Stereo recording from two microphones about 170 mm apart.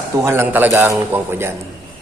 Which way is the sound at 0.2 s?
15° right (ahead or behind).